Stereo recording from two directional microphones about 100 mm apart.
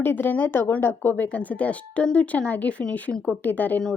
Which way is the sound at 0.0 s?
20° left (ahead or behind).